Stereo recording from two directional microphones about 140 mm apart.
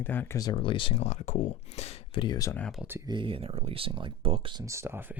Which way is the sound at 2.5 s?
5° left (ahead or behind).